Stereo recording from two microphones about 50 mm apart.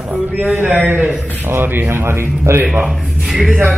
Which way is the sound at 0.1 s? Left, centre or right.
Right.